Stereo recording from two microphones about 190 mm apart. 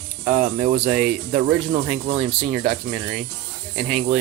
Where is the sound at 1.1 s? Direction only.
50° right (ahead or behind).